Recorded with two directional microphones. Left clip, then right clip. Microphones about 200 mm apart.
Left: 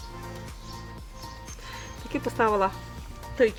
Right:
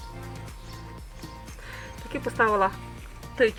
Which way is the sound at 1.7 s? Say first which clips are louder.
Left 2 dB; 30° left (ahead or behind).